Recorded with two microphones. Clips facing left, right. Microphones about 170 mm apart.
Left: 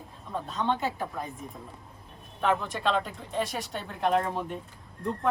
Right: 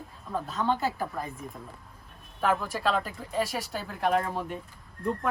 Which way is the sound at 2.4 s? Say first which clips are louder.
Even; centre (ahead or behind).